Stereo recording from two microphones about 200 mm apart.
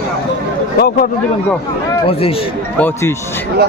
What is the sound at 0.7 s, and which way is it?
Speech, 50° left (ahead or behind).